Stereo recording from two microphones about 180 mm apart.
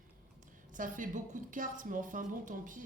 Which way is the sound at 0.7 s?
45° right (ahead or behind).